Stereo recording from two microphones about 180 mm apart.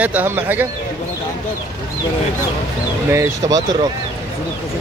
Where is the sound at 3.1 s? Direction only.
20° right (ahead or behind).